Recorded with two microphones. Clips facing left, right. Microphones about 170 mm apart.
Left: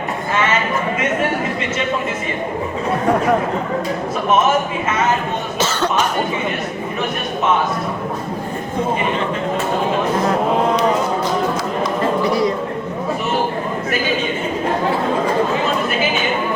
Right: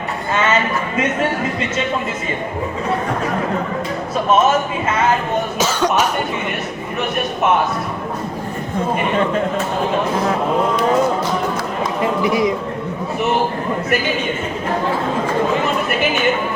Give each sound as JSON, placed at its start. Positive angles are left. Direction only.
{"t": 5.5, "sound": "cough", "side_deg": -10}
{"t": 12.2, "sound": "a man's voice", "side_deg": -20}